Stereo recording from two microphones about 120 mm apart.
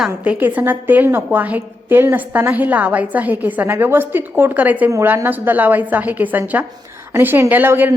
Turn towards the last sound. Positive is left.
turn(degrees=-15)  # may be behind; listen again after turning